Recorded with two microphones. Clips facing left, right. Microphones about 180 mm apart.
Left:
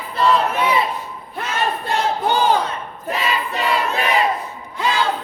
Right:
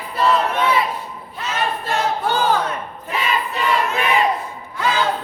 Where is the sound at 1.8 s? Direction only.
15° left (ahead or behind).